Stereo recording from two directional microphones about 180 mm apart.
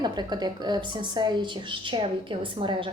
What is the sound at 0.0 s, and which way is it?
A woman's voice, 25° right (ahead or behind).